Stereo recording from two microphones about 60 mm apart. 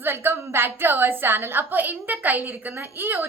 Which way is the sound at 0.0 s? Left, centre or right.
Right.